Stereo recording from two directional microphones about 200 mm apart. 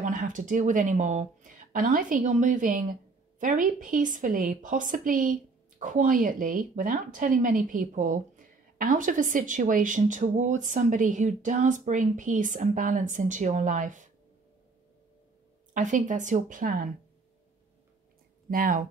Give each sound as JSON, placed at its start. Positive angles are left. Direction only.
{"t": 0.0, "sound": "speech", "side_deg": -40}
{"t": 15.7, "sound": "speech", "side_deg": -40}
{"t": 18.5, "sound": "speech", "side_deg": -45}